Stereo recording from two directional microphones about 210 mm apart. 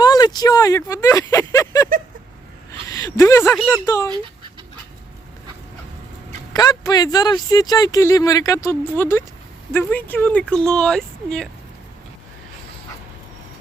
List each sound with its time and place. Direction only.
0.0 s a sound: 20° left (ahead or behind)
0.3 s speech: 15° left (ahead or behind)
2.9 s speech: 15° left (ahead or behind)
6.5 s speech: 15° left (ahead or behind)